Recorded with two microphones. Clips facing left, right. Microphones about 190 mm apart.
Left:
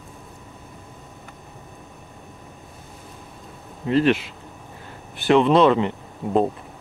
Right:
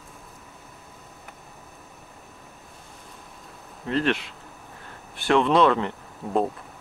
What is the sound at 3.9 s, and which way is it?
Speech, 5° left (ahead or behind).